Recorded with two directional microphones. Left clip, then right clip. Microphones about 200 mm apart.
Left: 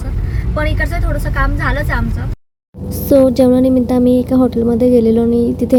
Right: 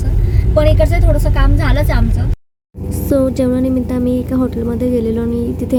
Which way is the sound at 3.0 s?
25° left (ahead or behind).